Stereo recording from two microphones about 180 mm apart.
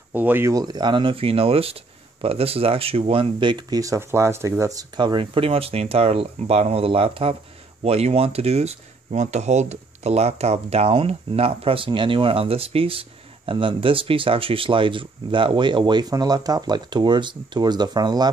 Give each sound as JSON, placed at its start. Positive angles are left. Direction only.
{"t": 0.1, "sound": "speech", "side_deg": -10}